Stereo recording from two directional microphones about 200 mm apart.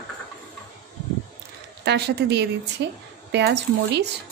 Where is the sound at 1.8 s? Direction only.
55° right (ahead or behind).